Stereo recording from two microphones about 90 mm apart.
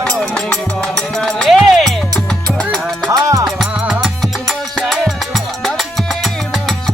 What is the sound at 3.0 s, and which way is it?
Music, 40° right (ahead or behind).